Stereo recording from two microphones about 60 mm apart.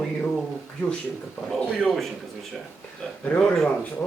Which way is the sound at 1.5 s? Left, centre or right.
Centre.